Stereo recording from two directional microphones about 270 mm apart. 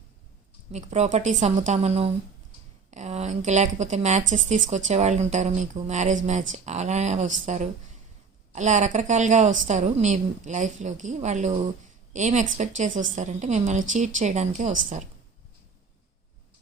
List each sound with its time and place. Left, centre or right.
0.7 s a woman's voice: right